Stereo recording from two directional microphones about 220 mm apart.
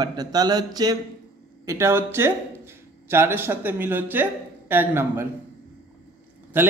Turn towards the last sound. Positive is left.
turn(degrees=-10)  # may be behind; listen again after turning